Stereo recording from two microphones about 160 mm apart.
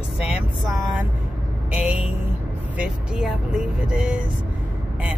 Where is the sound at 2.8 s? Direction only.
5° right (ahead or behind).